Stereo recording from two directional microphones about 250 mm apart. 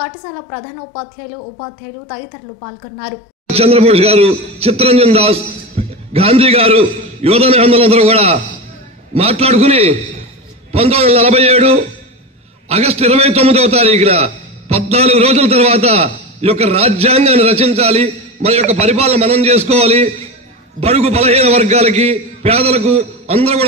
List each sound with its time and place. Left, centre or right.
3.4 s a man's voice: right